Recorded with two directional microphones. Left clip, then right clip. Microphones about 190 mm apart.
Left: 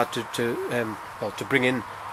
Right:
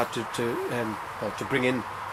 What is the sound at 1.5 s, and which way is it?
Speech, 15° left (ahead or behind).